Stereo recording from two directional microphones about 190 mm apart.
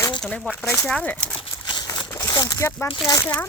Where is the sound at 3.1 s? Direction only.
10° left (ahead or behind).